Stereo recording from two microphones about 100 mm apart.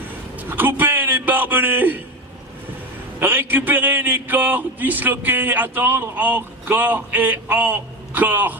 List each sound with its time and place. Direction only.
0.3 s a man's voice: 20° right (ahead or behind)
3.2 s speech: 20° right (ahead or behind)